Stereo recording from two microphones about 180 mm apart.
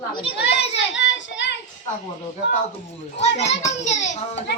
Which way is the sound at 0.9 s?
80° left.